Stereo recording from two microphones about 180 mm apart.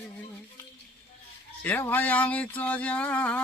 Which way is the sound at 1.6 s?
10° left (ahead or behind).